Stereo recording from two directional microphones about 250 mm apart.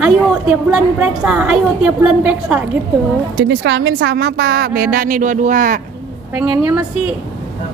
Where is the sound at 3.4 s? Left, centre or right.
Right.